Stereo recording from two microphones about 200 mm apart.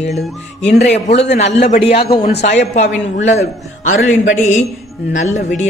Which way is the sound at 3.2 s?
40° left (ahead or behind).